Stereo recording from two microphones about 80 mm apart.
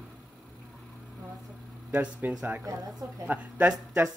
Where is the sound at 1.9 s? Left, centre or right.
Centre.